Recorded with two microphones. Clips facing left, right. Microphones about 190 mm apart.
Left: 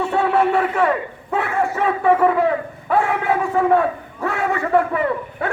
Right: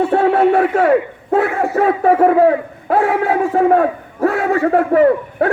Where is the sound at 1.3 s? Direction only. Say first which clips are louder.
Right 6 dB; 40° right (ahead or behind).